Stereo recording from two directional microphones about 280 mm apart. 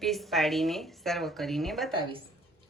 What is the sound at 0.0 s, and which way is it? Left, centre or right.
Speech, centre.